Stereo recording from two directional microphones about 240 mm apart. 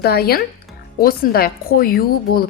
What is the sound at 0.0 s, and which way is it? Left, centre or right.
A woman's voice, left.